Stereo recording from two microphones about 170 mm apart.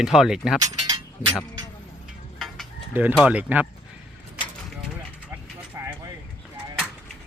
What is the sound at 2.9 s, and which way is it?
Speech, 10° right (ahead or behind).